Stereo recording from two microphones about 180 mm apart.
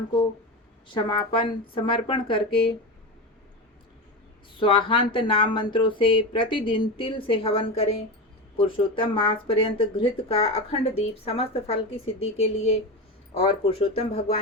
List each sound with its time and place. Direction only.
0.9 s speech: 25° left (ahead or behind)
4.6 s speech: 30° left (ahead or behind)